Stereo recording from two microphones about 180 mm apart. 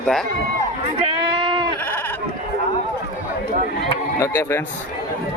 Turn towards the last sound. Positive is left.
turn(degrees=15)  # may be behind; listen again after turning